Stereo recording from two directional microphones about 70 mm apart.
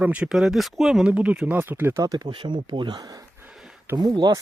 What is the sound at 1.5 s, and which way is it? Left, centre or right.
Speech, right.